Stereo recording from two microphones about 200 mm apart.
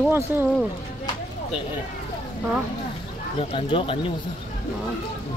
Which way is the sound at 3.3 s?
25° left (ahead or behind).